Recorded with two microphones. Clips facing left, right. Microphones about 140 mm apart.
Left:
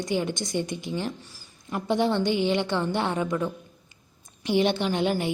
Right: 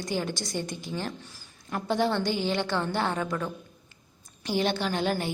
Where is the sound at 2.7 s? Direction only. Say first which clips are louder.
Left 2 dB; 20° left (ahead or behind).